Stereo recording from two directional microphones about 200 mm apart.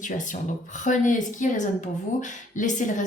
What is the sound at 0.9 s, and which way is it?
Speech, 40° left (ahead or behind).